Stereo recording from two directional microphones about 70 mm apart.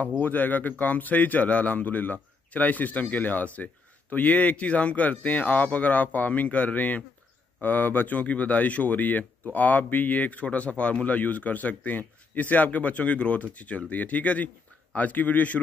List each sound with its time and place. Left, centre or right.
0.2 s speech: left